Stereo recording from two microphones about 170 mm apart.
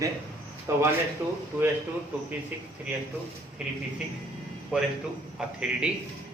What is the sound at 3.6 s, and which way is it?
A man's voice, 5° right (ahead or behind).